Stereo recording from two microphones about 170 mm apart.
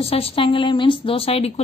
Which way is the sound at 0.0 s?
35° left (ahead or behind).